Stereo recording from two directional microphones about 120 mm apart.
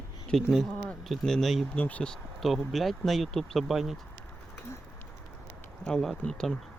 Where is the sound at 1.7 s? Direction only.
10° left (ahead or behind).